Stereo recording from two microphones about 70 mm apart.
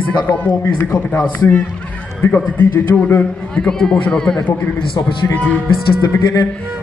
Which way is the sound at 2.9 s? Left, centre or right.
Left.